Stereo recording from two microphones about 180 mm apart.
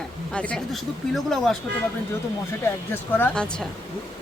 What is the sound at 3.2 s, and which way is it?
Speech, 10° left (ahead or behind).